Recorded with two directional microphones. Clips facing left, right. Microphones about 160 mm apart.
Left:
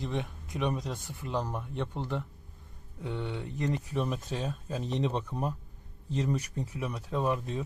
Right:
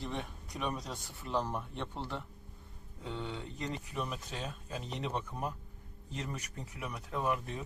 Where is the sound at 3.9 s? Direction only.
40° left (ahead or behind).